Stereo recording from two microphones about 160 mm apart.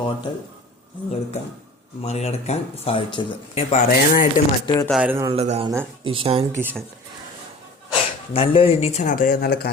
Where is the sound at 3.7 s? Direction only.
55° left (ahead or behind).